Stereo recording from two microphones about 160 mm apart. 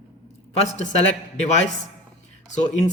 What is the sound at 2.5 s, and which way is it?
Speech, 45° left (ahead or behind).